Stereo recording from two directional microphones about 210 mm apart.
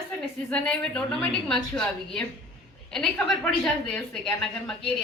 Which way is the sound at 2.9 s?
Centre (ahead or behind).